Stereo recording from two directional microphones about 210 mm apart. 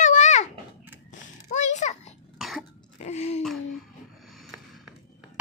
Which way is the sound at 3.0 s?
30° left (ahead or behind).